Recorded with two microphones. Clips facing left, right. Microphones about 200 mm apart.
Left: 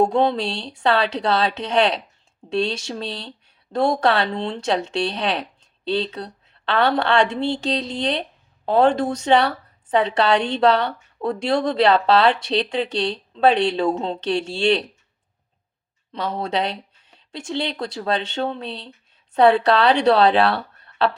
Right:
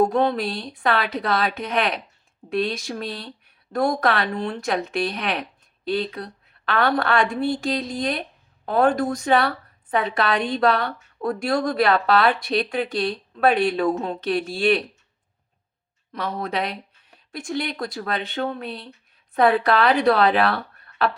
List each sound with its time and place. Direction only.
0.0 s speech: 25° left (ahead or behind)
16.1 s speech: 30° left (ahead or behind)